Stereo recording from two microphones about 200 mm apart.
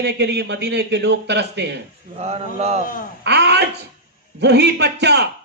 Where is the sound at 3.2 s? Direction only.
55° right (ahead or behind).